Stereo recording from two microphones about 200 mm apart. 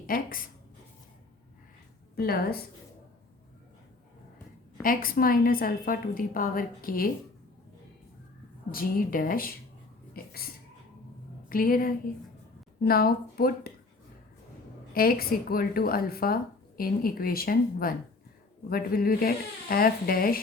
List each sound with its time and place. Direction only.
0.1 s speech: 45° left (ahead or behind)
2.1 s speech: 50° left (ahead or behind)
4.8 s speech: 45° left (ahead or behind)
8.7 s speech: 45° left (ahead or behind)
10.2 s a sound: 50° left (ahead or behind)
11.4 s speech: 45° left (ahead or behind)
14.9 s speech: 50° left (ahead or behind)